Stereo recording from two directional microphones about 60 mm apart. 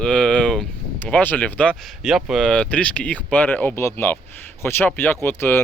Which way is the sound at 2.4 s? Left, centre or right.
Centre.